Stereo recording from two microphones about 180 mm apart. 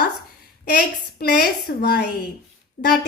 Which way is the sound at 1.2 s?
60° left (ahead or behind).